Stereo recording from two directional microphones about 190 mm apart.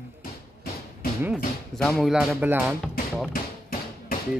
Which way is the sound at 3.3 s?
50° left (ahead or behind).